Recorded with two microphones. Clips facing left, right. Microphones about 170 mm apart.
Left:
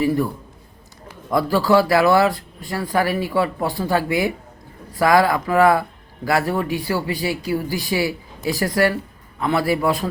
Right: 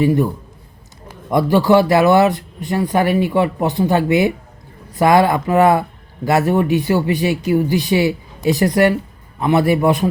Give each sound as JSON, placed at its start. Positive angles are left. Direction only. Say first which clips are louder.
{"t": 0.0, "sound": "speech", "louder": "right 4 dB", "side_deg": -20}
{"t": 1.3, "sound": "speech", "louder": "right 4 dB", "side_deg": -20}